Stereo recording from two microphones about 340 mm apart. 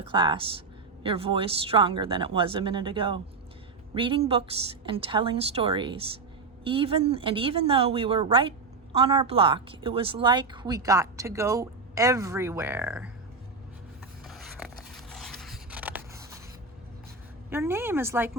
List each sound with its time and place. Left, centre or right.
0.1 s a woman's voice: centre
14.3 s a sound: centre
17.5 s a woman's voice: centre